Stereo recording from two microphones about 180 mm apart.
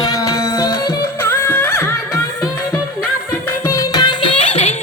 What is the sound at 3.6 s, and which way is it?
Music, 20° left (ahead or behind).